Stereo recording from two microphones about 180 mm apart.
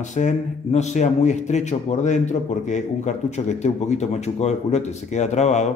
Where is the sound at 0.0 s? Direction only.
40° left (ahead or behind).